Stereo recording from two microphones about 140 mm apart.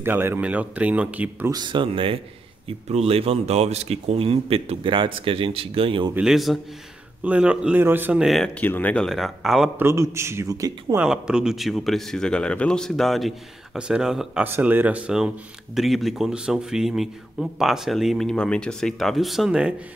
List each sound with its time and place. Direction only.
0.0 s speech: 15° right (ahead or behind)
1.5 s a man's voice: 35° right (ahead or behind)
6.1 s speech: centre (ahead or behind)
8.5 s speech: 15° left (ahead or behind)
9.8 s a man's voice: 20° right (ahead or behind)
11.0 s speech: 5° right (ahead or behind)